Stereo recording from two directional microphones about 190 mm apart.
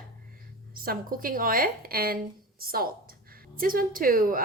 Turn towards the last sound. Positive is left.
turn(degrees=-45)  # may be behind; listen again after turning